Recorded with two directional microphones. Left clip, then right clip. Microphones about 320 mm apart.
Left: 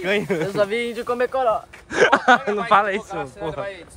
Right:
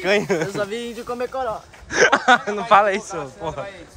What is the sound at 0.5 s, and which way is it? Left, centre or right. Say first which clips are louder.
Speech: left 5 dB; centre.